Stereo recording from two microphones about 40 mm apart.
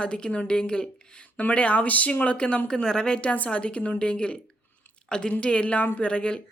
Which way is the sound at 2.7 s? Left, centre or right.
Centre.